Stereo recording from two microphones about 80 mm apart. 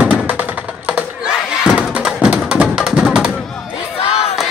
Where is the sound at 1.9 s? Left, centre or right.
Centre.